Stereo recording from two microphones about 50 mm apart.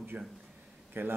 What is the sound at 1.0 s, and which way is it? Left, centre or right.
Speech, right.